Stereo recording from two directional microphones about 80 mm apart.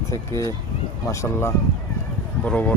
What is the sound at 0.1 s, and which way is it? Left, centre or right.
Speech, left.